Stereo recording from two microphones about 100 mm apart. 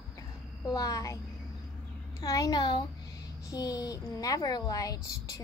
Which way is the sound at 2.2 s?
40° left (ahead or behind).